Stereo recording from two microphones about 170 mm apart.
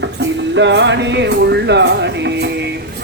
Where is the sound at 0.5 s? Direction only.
90° right.